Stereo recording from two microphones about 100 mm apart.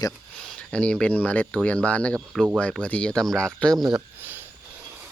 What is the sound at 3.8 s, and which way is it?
Speech, 45° right (ahead or behind).